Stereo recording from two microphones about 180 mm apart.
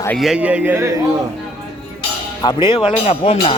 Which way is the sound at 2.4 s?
25° left (ahead or behind).